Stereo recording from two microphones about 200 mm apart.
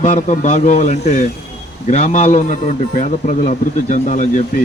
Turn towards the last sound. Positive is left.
turn(degrees=40)  # may be behind; listen again after turning